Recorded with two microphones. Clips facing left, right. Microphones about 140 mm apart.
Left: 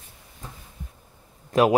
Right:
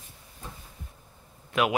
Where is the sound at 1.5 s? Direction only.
40° left (ahead or behind).